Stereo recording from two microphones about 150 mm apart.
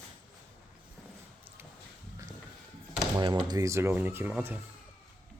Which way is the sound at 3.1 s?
30° right (ahead or behind).